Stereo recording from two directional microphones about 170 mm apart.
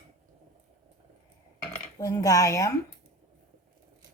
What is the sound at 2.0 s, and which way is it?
Speech, 20° left (ahead or behind).